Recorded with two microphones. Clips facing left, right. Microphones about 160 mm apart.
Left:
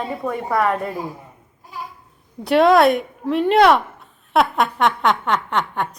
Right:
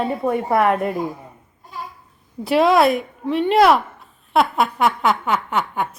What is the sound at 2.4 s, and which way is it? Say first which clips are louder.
A woman's voice: left 2 dB; centre (ahead or behind).